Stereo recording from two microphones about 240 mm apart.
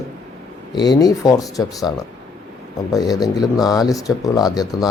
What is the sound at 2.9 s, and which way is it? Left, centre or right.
Speech, centre.